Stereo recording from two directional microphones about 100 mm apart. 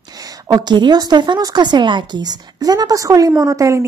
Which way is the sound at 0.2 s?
40° right (ahead or behind).